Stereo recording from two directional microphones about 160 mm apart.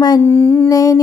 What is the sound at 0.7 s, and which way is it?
Mantra, 20° left (ahead or behind).